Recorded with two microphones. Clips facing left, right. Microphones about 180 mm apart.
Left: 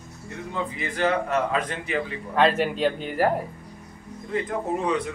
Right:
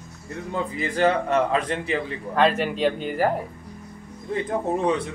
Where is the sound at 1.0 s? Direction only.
30° right (ahead or behind).